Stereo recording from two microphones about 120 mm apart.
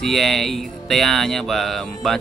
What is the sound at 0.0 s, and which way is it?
Music, 5° left (ahead or behind).